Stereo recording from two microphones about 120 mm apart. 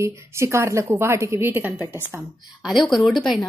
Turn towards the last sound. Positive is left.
turn(degrees=0)  # may be behind; listen again after turning